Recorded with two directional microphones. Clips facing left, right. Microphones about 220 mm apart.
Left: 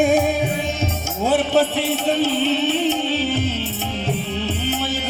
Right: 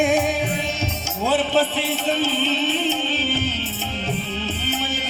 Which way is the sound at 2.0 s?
60° left (ahead or behind).